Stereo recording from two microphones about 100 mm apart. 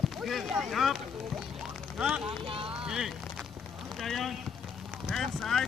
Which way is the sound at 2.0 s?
5° right (ahead or behind).